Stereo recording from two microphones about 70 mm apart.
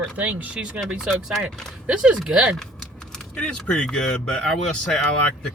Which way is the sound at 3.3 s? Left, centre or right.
Centre.